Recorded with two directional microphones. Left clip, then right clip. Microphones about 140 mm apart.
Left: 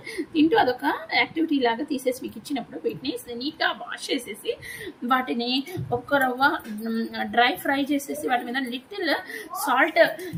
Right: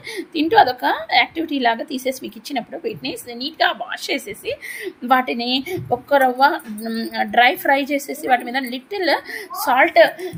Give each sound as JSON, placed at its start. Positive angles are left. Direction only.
{"t": 0.1, "sound": "a woman's voice", "side_deg": -55}